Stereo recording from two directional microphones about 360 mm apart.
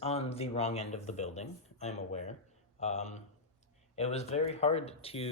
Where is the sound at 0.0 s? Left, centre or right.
Centre.